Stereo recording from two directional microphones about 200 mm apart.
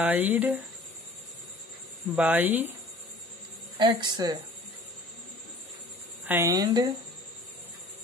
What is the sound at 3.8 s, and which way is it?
Speech, 20° right (ahead or behind).